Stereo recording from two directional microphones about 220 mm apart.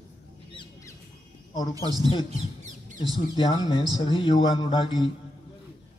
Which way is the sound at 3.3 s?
20° left (ahead or behind).